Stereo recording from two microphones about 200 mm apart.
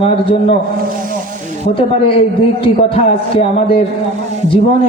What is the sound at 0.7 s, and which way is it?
Snake, 45° right (ahead or behind).